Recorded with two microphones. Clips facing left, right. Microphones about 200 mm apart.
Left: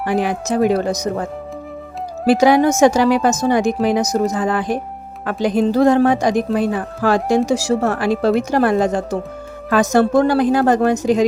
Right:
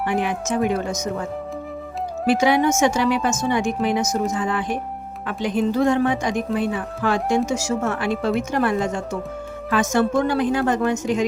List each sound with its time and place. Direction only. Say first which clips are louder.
0.0 s a woman's voice: left 4 dB; 35° left (ahead or behind)
2.2 s a woman's voice: left 5 dB; 35° left (ahead or behind)